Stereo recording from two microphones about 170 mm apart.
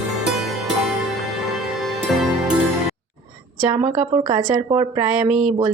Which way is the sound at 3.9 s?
20° right (ahead or behind).